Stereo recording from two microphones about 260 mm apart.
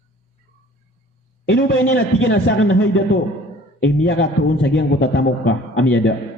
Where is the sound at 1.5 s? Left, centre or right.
Left.